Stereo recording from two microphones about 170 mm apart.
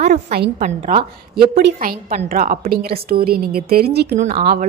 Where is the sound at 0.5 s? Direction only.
35° right (ahead or behind).